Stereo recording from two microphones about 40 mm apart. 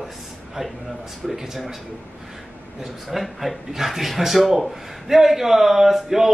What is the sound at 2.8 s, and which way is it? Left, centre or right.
Speech, centre.